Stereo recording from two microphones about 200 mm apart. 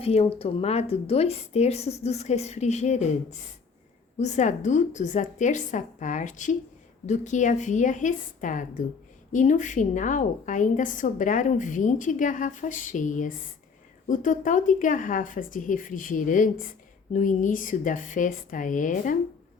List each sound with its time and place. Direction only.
0.0 s a woman's voice: 30° left (ahead or behind)